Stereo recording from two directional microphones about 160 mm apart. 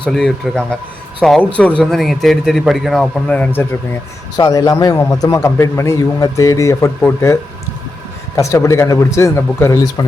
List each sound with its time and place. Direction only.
0.0 s a man's voice: 5° left (ahead or behind)
4.4 s a man's voice: 25° left (ahead or behind)
8.4 s a man's voice: 20° left (ahead or behind)